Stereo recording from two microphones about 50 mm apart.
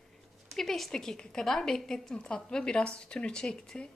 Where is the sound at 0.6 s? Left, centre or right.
Centre.